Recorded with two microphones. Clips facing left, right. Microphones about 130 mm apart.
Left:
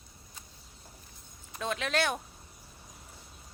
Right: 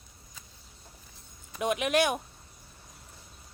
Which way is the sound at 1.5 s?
15° right (ahead or behind).